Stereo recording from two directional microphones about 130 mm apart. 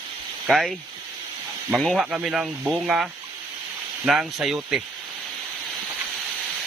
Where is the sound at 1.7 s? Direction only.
Centre (ahead or behind).